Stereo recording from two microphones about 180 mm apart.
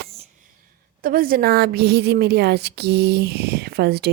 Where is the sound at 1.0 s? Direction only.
55° right (ahead or behind).